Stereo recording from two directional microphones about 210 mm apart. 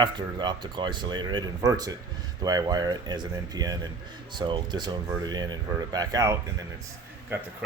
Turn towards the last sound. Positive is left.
turn(degrees=-10)  # may be behind; listen again after turning